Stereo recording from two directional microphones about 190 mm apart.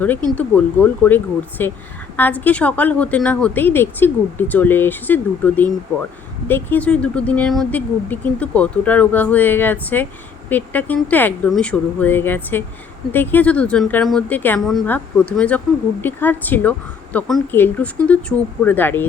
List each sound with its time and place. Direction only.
0.3 s speech: 5° left (ahead or behind)